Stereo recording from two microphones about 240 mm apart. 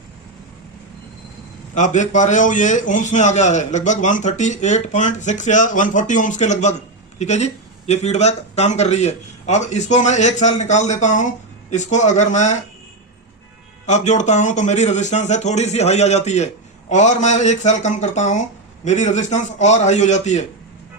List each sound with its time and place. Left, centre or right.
1.7 s a man's voice: left
13.8 s a man's voice: left